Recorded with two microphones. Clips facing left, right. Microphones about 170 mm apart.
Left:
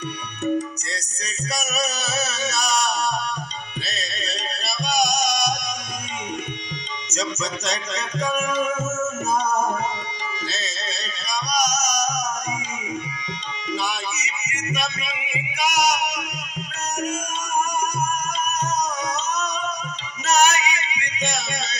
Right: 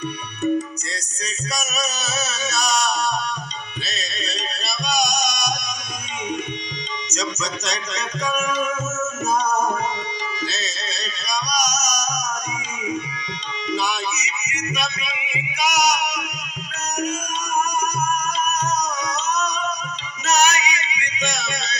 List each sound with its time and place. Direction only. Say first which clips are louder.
1.2 s music: even; 60° left (ahead or behind)
7.1 s music: left 1 dB; 55° left (ahead or behind)
11.3 s music: left 1 dB; 50° left (ahead or behind)
13.7 s music: right 3 dB; 50° left (ahead or behind)
15.5 s a sound: right 1 dB; 50° left (ahead or behind)
18.6 s music: right 1 dB; 50° left (ahead or behind)